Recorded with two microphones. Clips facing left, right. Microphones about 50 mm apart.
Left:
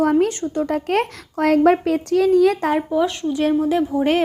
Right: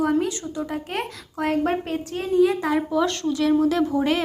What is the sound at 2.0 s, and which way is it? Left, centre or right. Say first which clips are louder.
Speech: left 4 dB; left.